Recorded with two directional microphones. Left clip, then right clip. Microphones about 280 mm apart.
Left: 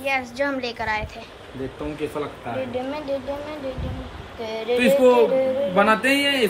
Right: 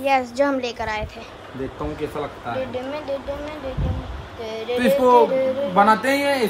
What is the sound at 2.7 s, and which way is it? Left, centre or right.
Speech, centre.